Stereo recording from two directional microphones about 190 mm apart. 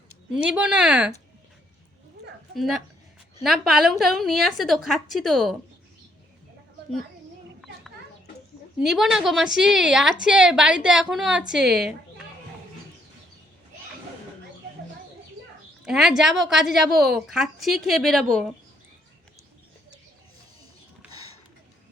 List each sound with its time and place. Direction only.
0.4 s speech: 5° right (ahead or behind)
2.6 s a woman's voice: centre (ahead or behind)
8.8 s a woman's voice: centre (ahead or behind)
15.8 s a woman's voice: 5° right (ahead or behind)
21.1 s a sound: 30° left (ahead or behind)